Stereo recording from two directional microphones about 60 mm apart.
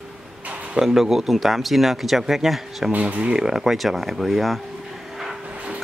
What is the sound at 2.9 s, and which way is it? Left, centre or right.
Speech, right.